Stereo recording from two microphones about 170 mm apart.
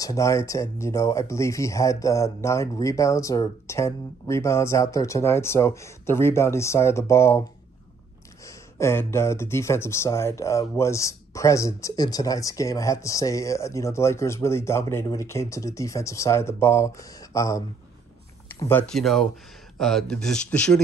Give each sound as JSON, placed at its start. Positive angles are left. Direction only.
{"t": 0.0, "sound": "speech", "side_deg": 20}
{"t": 8.5, "sound": "speech", "side_deg": 15}